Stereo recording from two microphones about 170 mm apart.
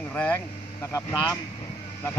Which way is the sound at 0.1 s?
10° left (ahead or behind).